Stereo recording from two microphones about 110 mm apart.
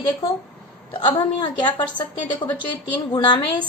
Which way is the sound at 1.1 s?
40° left (ahead or behind).